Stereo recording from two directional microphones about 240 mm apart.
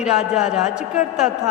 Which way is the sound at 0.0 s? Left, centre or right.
Centre.